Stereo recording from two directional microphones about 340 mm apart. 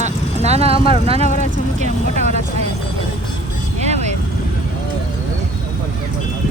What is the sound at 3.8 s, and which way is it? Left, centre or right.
Vehicle, centre.